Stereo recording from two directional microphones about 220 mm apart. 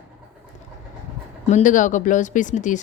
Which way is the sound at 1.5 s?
35° left (ahead or behind).